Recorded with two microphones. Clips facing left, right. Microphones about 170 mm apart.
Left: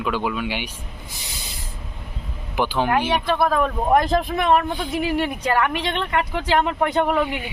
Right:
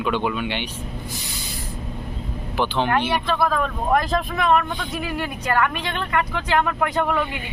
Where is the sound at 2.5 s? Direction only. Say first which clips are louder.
Left 1 dB; 10° left (ahead or behind).